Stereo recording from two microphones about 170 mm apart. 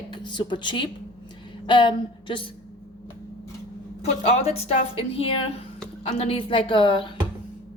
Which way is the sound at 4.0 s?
35° left (ahead or behind).